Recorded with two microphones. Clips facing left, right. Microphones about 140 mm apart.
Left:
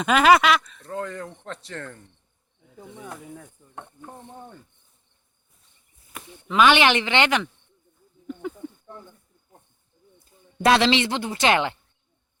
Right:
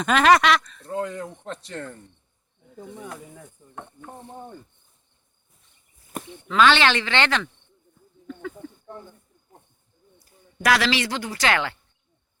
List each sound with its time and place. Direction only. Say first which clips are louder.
0.0 s speech: left 1 dB; 5° left (ahead or behind)
0.9 s speech: right 3 dB; 5° right (ahead or behind)
6.5 s speech: left 1 dB; 15° left (ahead or behind)
8.3 s a sound: left 2 dB; 20° left (ahead or behind)
10.2 s speech: left 4 dB; 25° left (ahead or behind)